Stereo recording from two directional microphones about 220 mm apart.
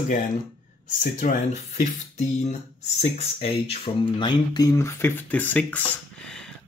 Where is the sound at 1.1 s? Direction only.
30° left (ahead or behind).